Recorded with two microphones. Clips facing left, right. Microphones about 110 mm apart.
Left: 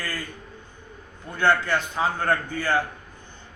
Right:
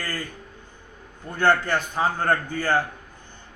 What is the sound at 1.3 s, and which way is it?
A man's voice, 45° right (ahead or behind).